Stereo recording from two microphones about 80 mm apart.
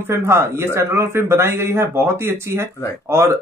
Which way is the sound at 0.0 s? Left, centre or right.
Right.